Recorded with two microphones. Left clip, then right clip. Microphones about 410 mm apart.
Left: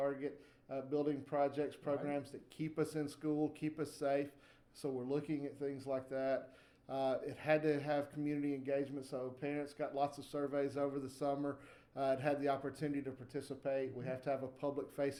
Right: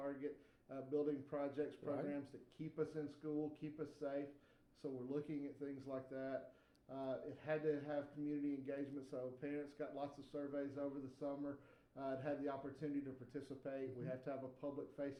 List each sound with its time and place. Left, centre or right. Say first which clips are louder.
0.7 s speech: left 4 dB; left